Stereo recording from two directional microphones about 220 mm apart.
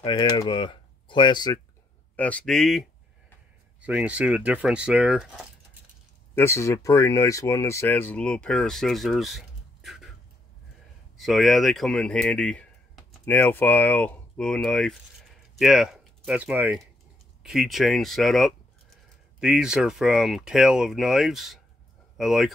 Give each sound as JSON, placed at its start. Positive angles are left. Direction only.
{"t": 0.0, "sound": "speech", "side_deg": 20}
{"t": 2.1, "sound": "speech", "side_deg": 5}
{"t": 3.8, "sound": "speech", "side_deg": -5}
{"t": 6.3, "sound": "speech", "side_deg": 10}
{"t": 11.1, "sound": "speech", "side_deg": 0}